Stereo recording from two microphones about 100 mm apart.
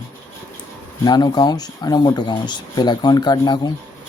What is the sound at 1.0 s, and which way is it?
Speech, 45° left (ahead or behind).